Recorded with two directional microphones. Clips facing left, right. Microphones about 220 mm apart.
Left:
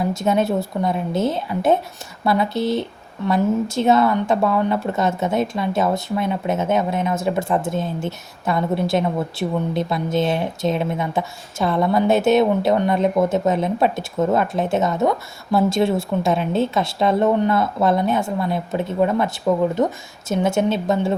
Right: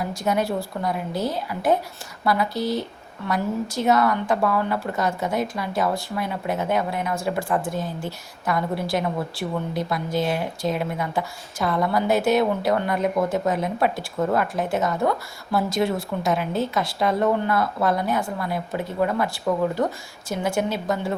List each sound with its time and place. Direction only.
0.0 s a woman's voice: 25° left (ahead or behind)